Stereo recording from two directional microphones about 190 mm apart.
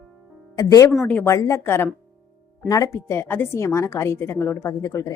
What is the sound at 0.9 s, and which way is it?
A woman's voice, 10° left (ahead or behind).